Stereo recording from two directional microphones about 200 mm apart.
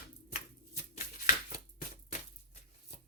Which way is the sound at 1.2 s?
40° left (ahead or behind).